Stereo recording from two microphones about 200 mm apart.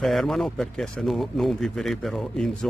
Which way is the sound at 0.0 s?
Centre (ahead or behind).